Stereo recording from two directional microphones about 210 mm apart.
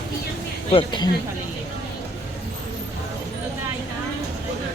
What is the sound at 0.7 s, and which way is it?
Speech, 25° left (ahead or behind).